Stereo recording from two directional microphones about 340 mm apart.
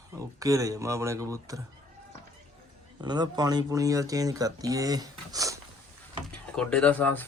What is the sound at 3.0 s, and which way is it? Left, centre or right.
Speech, centre.